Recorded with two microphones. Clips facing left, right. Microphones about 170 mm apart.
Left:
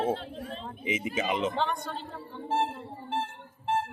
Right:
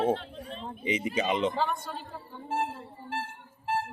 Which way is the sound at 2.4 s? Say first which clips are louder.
Left 3 dB; 30° left (ahead or behind).